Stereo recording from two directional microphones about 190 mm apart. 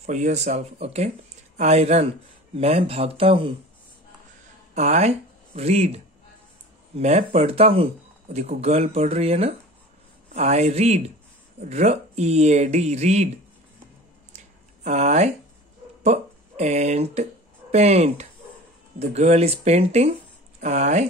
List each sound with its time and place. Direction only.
0.0 s speech: 35° right (ahead or behind)
4.7 s speech: 35° right (ahead or behind)
7.0 s speech: 35° right (ahead or behind)
14.8 s speech: 35° right (ahead or behind)